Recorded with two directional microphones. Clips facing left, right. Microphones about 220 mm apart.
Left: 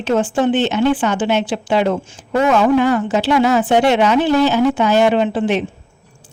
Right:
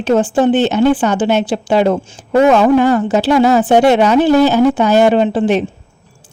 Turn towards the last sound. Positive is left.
turn(degrees=-40)  # may be behind; listen again after turning